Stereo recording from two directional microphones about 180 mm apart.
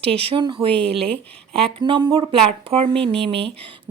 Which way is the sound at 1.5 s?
30° right (ahead or behind).